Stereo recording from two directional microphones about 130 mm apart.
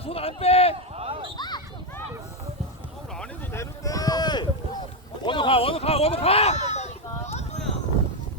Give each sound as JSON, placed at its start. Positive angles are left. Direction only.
{"t": 0.0, "sound": "speech", "side_deg": 50}
{"t": 0.9, "sound": "a sound", "side_deg": -45}
{"t": 1.4, "sound": "run", "side_deg": 35}
{"t": 3.5, "sound": "run", "side_deg": 25}
{"t": 5.2, "sound": "speech", "side_deg": 40}
{"t": 7.3, "sound": "a sound", "side_deg": 60}